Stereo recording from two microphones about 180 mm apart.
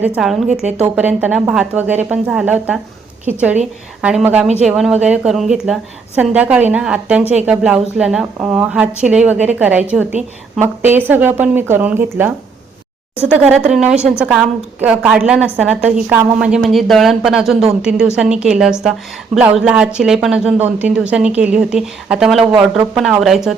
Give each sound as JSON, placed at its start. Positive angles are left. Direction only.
{"t": 0.0, "sound": "a woman's voice", "side_deg": -5}
{"t": 0.4, "sound": "a woman's voice", "side_deg": -40}
{"t": 0.9, "sound": "a woman's voice", "side_deg": -10}
{"t": 4.0, "sound": "a woman's voice", "side_deg": -10}